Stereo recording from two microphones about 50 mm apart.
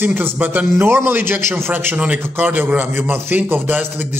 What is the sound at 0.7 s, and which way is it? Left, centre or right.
A man's voice, right.